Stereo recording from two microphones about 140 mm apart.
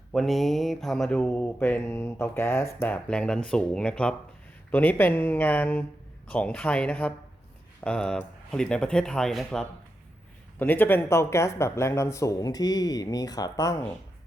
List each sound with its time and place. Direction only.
0.1 s mantra: centre (ahead or behind)
7.9 s speech: 5° left (ahead or behind)
10.6 s speech: 15° left (ahead or behind)